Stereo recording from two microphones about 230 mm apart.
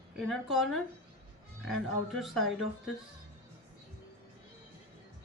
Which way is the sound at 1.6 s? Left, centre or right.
Centre.